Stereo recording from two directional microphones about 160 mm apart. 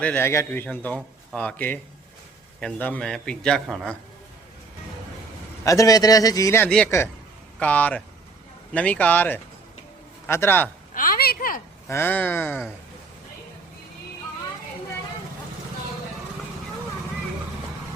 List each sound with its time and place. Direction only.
0.0 s a man's voice: 15° left (ahead or behind)
5.6 s a man's voice: 20° left (ahead or behind)
6.7 s a man's voice: 5° left (ahead or behind)
10.9 s a sound: 60° left (ahead or behind)
11.9 s a man's voice: 15° left (ahead or behind)